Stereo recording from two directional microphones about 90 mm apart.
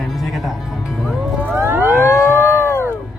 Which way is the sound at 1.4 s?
25° right (ahead or behind).